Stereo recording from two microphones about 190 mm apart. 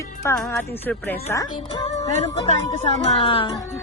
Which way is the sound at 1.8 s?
35° left (ahead or behind).